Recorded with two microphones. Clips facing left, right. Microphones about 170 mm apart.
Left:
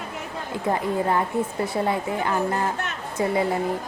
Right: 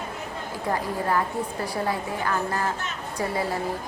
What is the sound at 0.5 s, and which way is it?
A woman's voice, 20° left (ahead or behind).